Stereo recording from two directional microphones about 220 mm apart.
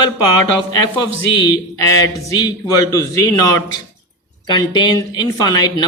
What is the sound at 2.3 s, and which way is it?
Speech, 15° left (ahead or behind).